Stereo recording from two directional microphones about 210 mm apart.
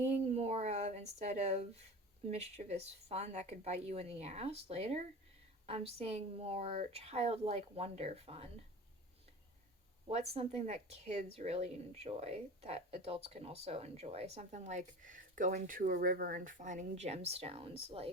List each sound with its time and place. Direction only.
0.1 s a sound: 30° right (ahead or behind)
2.3 s a woman's voice: 30° right (ahead or behind)
10.1 s a woman's voice: 30° right (ahead or behind)